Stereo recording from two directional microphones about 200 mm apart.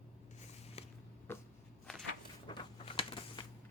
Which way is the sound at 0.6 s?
30° left (ahead or behind).